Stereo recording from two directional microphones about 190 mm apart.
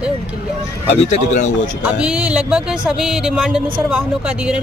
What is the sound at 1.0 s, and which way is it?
Speech, 40° left (ahead or behind).